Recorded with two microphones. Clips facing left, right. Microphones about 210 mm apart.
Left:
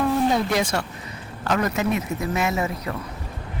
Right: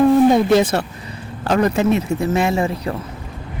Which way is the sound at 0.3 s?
30° right (ahead or behind).